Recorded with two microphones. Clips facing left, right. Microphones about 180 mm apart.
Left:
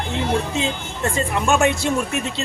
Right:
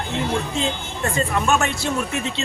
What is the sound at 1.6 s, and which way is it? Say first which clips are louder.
Speech: left 5 dB; 20° left (ahead or behind).